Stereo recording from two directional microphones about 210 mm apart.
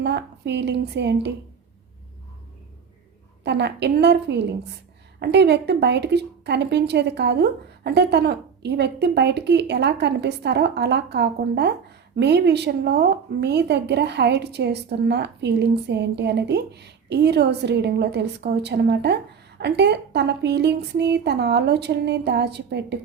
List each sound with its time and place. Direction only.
0.0 s a woman's voice: 55° right (ahead or behind)
3.4 s a woman's voice: 55° right (ahead or behind)